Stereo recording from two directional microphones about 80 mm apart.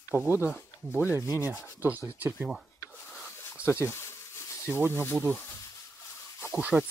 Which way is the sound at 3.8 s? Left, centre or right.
Left.